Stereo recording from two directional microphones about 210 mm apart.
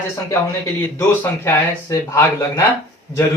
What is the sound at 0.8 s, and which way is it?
Speech, 10° left (ahead or behind).